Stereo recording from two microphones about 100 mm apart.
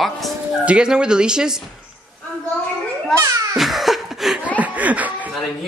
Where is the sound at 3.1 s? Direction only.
30° right (ahead or behind).